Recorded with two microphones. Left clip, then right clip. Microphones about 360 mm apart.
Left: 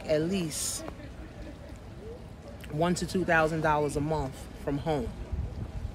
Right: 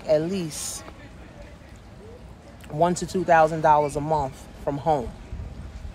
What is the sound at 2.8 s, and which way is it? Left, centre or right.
Speech, centre.